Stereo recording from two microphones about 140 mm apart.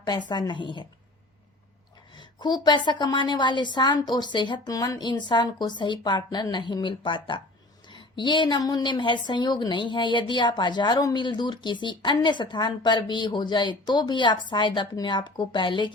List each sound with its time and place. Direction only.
0.0 s a woman's voice: 30° left (ahead or behind)
2.1 s a woman's voice: 30° left (ahead or behind)